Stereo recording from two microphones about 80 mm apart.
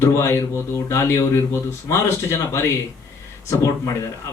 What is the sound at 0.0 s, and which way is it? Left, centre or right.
Speech, left.